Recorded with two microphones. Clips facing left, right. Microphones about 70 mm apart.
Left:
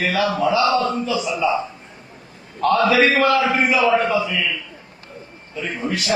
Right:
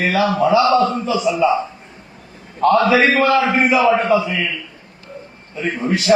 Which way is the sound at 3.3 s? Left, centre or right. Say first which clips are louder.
Right 2 dB; right.